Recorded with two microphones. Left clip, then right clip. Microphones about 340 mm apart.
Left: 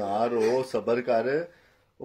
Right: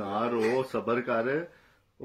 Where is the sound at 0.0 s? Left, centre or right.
Centre.